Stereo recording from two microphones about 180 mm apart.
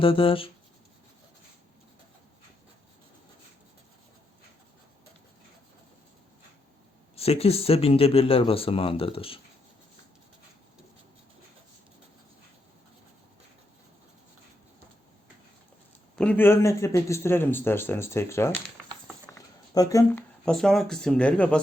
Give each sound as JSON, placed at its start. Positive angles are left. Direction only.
{"t": 0.0, "sound": "speech", "side_deg": 30}
{"t": 7.2, "sound": "speech", "side_deg": 35}
{"t": 16.1, "sound": "a man's voice", "side_deg": 10}
{"t": 19.3, "sound": "a sound", "side_deg": 20}
{"t": 20.4, "sound": "speech", "side_deg": 5}